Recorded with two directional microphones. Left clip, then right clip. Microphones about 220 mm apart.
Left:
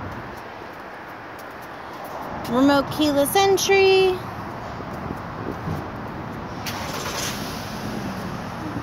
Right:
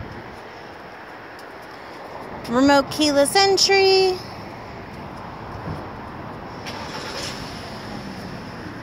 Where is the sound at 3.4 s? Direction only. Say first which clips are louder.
Right 1 dB; 25° right (ahead or behind).